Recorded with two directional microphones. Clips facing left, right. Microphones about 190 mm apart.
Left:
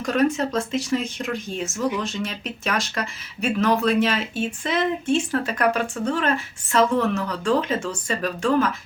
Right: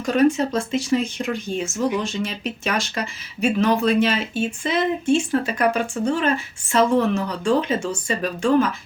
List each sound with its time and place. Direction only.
0.3 s speech: centre (ahead or behind)
1.7 s speech: 25° right (ahead or behind)
2.0 s speech: centre (ahead or behind)